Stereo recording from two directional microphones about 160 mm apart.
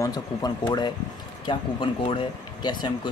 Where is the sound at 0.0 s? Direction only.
25° left (ahead or behind).